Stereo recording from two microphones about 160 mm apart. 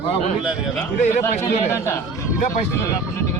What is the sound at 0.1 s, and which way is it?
Speech, 45° left (ahead or behind).